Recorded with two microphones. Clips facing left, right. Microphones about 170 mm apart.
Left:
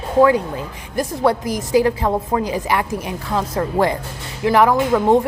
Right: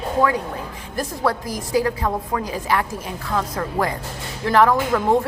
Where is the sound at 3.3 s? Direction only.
25° left (ahead or behind).